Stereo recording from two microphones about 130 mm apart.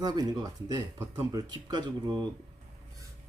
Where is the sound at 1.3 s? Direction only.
35° right (ahead or behind).